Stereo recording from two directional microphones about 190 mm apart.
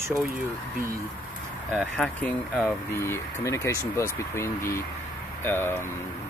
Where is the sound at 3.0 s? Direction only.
15° left (ahead or behind).